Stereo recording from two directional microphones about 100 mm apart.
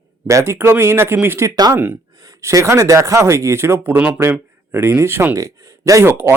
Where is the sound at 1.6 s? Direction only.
40° right (ahead or behind).